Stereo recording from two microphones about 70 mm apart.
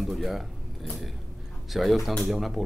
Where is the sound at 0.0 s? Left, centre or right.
Centre.